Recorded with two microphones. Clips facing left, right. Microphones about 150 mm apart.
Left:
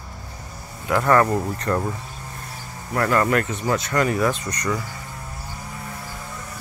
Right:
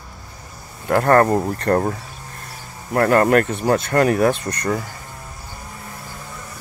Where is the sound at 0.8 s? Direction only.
45° right (ahead or behind).